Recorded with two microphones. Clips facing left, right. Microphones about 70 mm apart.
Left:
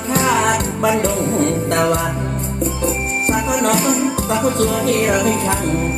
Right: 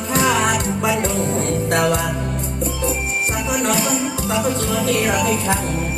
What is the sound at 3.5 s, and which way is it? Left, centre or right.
Music, left.